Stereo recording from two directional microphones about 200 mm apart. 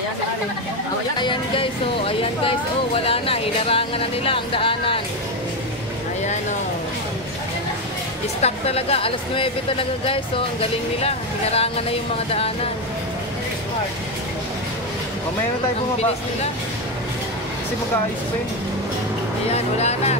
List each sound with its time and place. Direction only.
1.1 s speech: 25° left (ahead or behind)
8.4 s speech: 30° left (ahead or behind)
19.5 s speech: 30° left (ahead or behind)